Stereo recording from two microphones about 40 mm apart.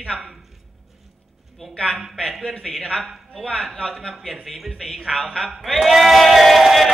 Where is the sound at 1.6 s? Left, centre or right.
Centre.